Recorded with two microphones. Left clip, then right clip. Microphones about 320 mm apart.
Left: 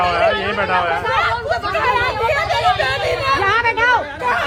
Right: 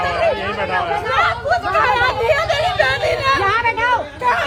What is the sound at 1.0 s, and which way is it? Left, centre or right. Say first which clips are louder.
Hubbub: right 1 dB; centre.